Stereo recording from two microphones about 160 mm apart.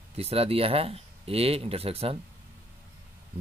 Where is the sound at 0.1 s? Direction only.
40° right (ahead or behind).